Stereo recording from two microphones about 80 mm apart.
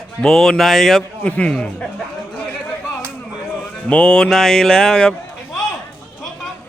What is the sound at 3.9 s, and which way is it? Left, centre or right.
Music, centre.